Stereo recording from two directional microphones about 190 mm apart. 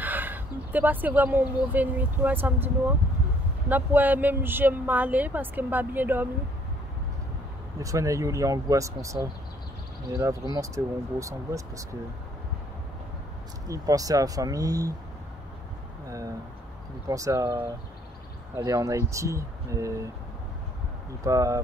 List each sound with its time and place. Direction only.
0.0 s speech: 10° right (ahead or behind)
7.8 s speech: 15° right (ahead or behind)
10.5 s speech: 15° right (ahead or behind)
13.7 s speech: 20° right (ahead or behind)
17.1 s speech: 15° right (ahead or behind)
21.2 s speech: 15° right (ahead or behind)